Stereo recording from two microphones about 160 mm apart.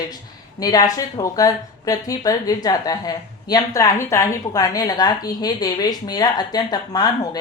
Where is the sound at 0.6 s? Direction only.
25° left (ahead or behind).